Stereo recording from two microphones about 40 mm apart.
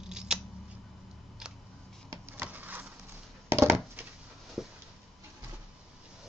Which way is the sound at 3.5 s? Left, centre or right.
Right.